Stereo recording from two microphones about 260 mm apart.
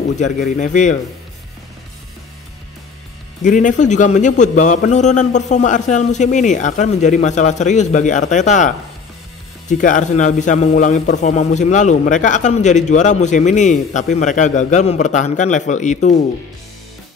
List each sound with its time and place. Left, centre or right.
0.1 s a man's voice: left
3.4 s a man's voice: left